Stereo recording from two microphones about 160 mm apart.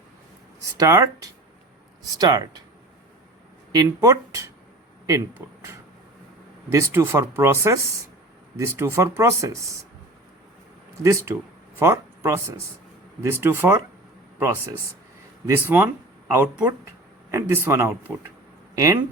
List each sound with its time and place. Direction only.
0.6 s speech: 20° right (ahead or behind)
3.7 s speech: 20° right (ahead or behind)
6.7 s speech: 15° right (ahead or behind)
11.0 s speech: 15° right (ahead or behind)
15.4 s speech: 15° right (ahead or behind)